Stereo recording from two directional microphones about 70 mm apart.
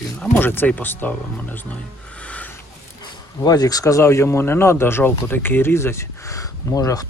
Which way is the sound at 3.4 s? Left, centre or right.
Left.